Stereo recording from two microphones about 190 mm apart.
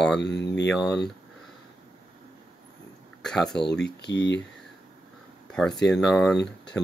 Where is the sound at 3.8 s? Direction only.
65° left (ahead or behind).